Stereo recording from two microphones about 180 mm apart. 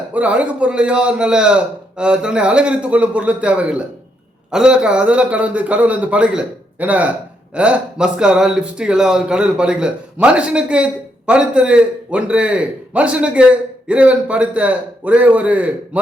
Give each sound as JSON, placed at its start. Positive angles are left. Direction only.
{"t": 0.1, "sound": "a man's voice", "side_deg": -5}